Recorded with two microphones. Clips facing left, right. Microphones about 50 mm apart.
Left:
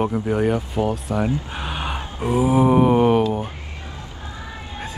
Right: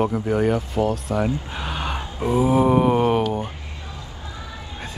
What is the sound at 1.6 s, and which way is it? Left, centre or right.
Gasp, centre.